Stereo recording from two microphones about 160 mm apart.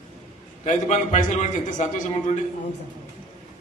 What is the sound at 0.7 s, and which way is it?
A man's voice, 45° left (ahead or behind).